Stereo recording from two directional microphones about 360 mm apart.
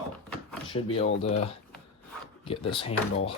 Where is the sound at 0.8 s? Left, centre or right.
Centre.